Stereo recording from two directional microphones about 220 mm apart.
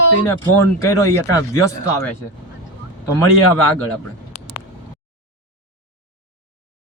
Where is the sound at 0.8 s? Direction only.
15° left (ahead or behind).